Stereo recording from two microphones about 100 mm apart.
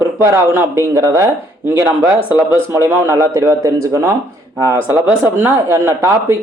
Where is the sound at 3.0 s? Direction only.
25° right (ahead or behind).